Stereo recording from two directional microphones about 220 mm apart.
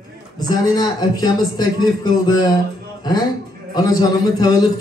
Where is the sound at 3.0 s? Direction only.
20° left (ahead or behind).